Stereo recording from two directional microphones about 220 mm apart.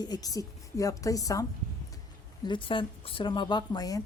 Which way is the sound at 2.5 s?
25° left (ahead or behind).